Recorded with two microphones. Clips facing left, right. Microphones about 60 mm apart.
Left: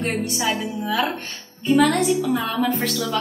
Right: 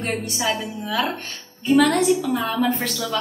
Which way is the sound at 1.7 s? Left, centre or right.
Centre.